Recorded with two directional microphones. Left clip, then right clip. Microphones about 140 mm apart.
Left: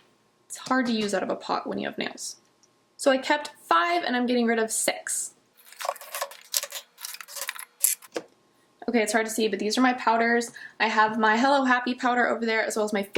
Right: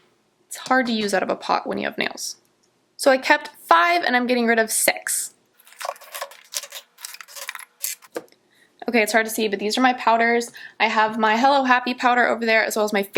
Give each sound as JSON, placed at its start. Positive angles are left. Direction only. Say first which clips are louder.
{"t": 0.5, "sound": "a woman's voice", "louder": "right 6 dB", "side_deg": -20}
{"t": 5.6, "sound": "a sound", "louder": "right 1 dB", "side_deg": 0}
{"t": 8.8, "sound": "speech", "louder": "right 5 dB", "side_deg": -20}